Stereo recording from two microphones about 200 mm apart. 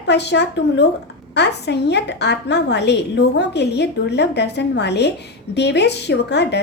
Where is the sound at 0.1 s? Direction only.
60° left (ahead or behind).